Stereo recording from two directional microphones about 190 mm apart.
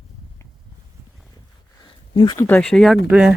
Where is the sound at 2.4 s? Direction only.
10° left (ahead or behind).